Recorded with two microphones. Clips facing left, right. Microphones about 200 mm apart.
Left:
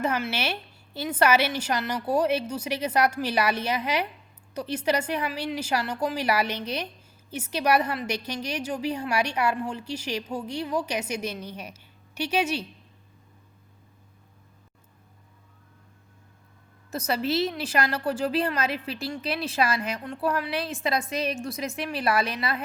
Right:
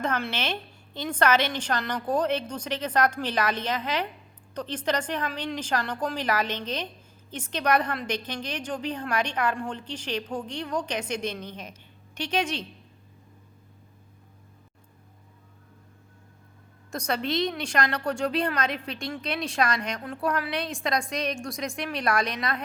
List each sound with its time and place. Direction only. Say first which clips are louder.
0.0 s a woman's voice: left 2 dB; 10° left (ahead or behind)
16.9 s a woman's voice: left 2 dB; 5° left (ahead or behind)